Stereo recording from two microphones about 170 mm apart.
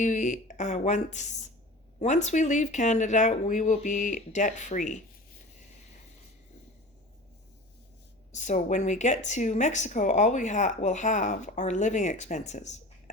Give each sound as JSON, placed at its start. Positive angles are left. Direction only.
{"t": 0.0, "sound": "speech", "side_deg": 45}
{"t": 8.3, "sound": "speech", "side_deg": 45}